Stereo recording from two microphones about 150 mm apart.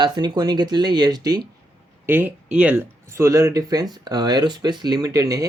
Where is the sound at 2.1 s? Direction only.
15° right (ahead or behind).